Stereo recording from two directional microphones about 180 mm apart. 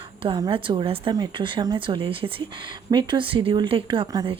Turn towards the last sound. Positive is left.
turn(degrees=-25)  # may be behind; listen again after turning